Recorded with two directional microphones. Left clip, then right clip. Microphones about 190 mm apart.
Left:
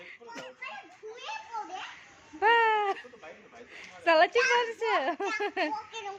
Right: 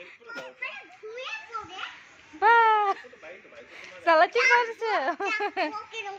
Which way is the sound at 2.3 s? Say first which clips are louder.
Right 4 dB; 5° left (ahead or behind).